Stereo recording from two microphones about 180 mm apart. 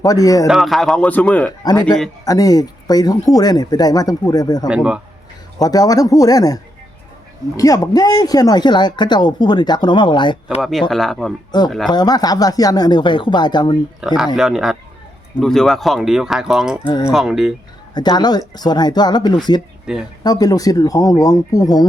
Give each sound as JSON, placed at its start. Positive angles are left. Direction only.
{"t": 0.0, "sound": "speech", "side_deg": 20}
{"t": 0.4, "sound": "speech", "side_deg": 0}
{"t": 1.6, "sound": "speech", "side_deg": 20}
{"t": 4.7, "sound": "speech", "side_deg": -5}
{"t": 5.5, "sound": "speech", "side_deg": 20}
{"t": 10.6, "sound": "speech", "side_deg": 0}
{"t": 11.9, "sound": "speech", "side_deg": 20}
{"t": 14.0, "sound": "speech", "side_deg": -5}
{"t": 17.9, "sound": "speech", "side_deg": 25}
{"t": 19.9, "sound": "speech", "side_deg": -5}
{"t": 20.2, "sound": "speech", "side_deg": 20}